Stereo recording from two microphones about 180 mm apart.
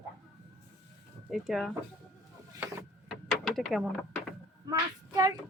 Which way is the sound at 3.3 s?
Centre (ahead or behind).